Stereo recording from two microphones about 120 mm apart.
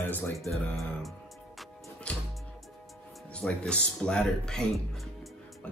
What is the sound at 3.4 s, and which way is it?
Speech, 10° left (ahead or behind).